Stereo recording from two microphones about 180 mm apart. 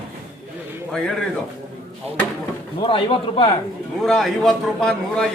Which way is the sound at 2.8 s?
30° left (ahead or behind).